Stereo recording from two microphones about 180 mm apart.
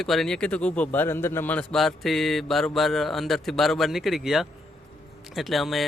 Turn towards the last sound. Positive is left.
turn(degrees=0)  # may be behind; listen again after turning